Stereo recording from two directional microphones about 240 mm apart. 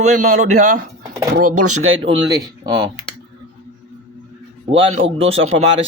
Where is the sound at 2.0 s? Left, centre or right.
Centre.